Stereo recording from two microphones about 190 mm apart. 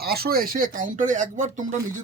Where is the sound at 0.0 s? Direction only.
55° right (ahead or behind).